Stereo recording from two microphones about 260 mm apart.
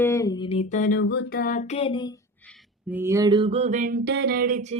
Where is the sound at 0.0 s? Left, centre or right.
Centre.